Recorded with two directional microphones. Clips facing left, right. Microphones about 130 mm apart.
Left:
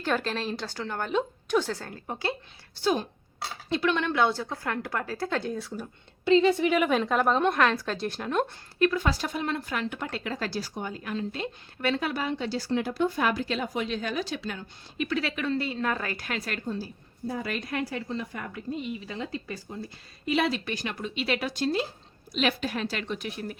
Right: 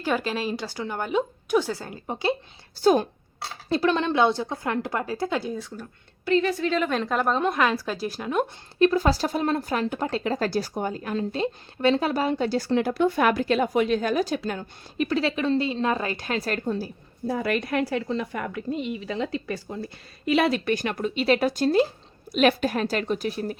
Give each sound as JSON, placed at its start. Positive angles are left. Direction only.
{"t": 0.0, "sound": "a woman's voice", "side_deg": -10}
{"t": 2.8, "sound": "speech", "side_deg": -50}
{"t": 3.7, "sound": "a woman's voice", "side_deg": -35}
{"t": 6.2, "sound": "a woman's voice", "side_deg": 20}
{"t": 8.8, "sound": "speech", "side_deg": -35}
{"t": 16.6, "sound": "a woman's voice", "side_deg": -70}